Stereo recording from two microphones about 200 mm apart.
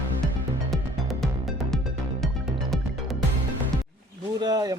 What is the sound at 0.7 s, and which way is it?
Music, centre (ahead or behind).